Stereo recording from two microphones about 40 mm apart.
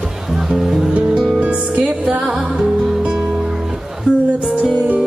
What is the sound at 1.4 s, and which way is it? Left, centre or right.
Music, right.